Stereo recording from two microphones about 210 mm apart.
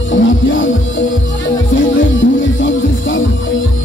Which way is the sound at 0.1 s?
65° left (ahead or behind).